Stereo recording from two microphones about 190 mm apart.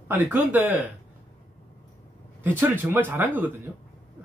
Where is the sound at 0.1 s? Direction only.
10° right (ahead or behind).